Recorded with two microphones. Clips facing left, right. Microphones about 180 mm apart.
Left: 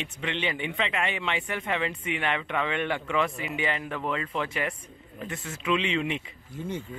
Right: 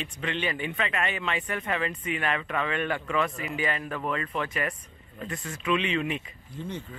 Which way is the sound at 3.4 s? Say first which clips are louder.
Even; 20° left (ahead or behind).